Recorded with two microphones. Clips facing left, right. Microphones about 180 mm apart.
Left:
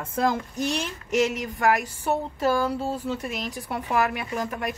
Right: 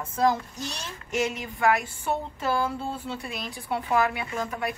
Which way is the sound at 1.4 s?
45° left (ahead or behind).